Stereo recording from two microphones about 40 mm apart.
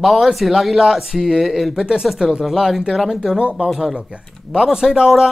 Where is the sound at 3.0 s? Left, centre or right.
Centre.